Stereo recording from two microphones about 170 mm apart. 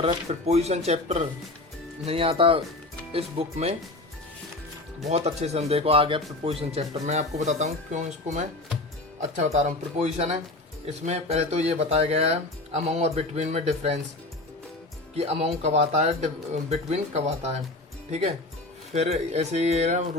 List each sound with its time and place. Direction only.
0.0 s speech: 40° right (ahead or behind)
5.0 s speech: 40° right (ahead or behind)
15.1 s speech: 35° right (ahead or behind)
18.9 s speech: 40° right (ahead or behind)